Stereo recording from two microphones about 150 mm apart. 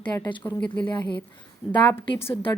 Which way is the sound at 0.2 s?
30° left (ahead or behind).